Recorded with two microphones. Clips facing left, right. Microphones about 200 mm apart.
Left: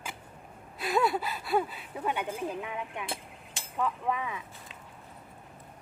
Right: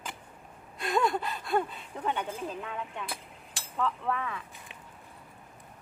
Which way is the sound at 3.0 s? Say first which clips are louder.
Left 2 dB; 25° left (ahead or behind).